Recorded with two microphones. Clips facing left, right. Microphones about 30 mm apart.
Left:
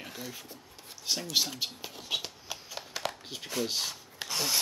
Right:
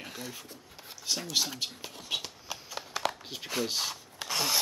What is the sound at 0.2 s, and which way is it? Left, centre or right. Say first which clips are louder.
Speech: even; centre.